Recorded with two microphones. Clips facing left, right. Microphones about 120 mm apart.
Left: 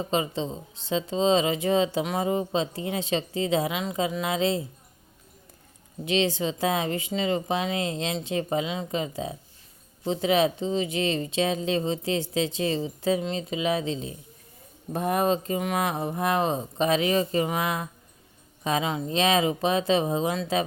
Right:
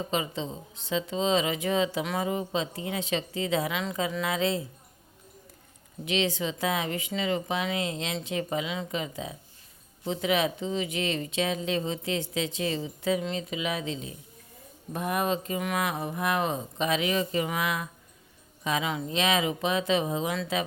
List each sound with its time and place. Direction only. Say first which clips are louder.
0.1 s speech: left 4 dB; 30° left (ahead or behind)
6.1 s speech: left 3 dB; 30° left (ahead or behind)